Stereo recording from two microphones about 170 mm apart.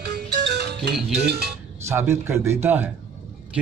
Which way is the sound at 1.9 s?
15° right (ahead or behind).